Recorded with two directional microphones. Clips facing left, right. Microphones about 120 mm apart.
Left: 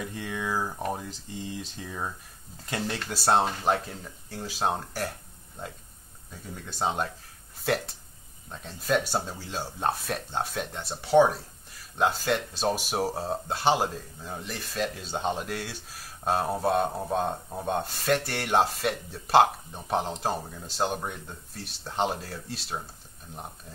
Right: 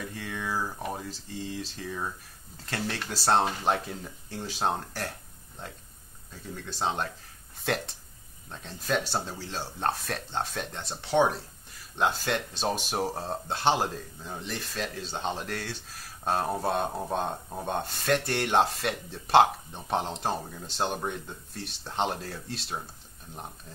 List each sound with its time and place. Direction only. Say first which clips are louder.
0.0 s a sound: left 2 dB; 15° left (ahead or behind)
0.9 s speech: even; 20° left (ahead or behind)
6.8 s speech: left 2 dB; 10° left (ahead or behind)
8.5 s speech: left 3 dB; 5° left (ahead or behind)